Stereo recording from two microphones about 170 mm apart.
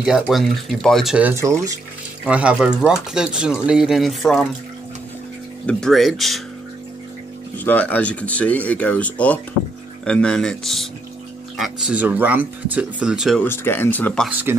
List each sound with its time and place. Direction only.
0.0 s speech: centre (ahead or behind)
1.3 s speech: 15° right (ahead or behind)
2.2 s speech: 5° right (ahead or behind)
5.7 s speech: 5° left (ahead or behind)
7.5 s speech: 10° left (ahead or behind)
13.4 s speech: 10° left (ahead or behind)
14.3 s speech: 10° right (ahead or behind)